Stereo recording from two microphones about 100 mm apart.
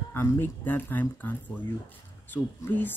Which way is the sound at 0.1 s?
20° left (ahead or behind).